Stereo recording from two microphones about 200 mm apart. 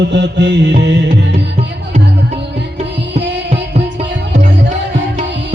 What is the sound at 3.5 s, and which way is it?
Music, 30° right (ahead or behind).